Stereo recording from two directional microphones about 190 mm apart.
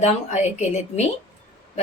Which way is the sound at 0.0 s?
35° left (ahead or behind).